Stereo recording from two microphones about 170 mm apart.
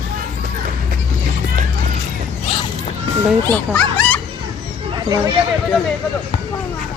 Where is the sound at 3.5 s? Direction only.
10° left (ahead or behind).